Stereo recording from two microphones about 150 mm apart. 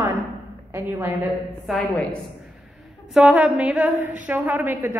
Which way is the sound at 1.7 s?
Centre (ahead or behind).